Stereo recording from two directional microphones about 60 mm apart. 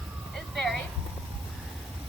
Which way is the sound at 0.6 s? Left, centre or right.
Centre.